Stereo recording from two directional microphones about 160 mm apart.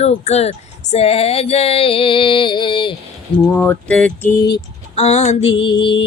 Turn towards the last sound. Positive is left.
turn(degrees=30)  # may be behind; listen again after turning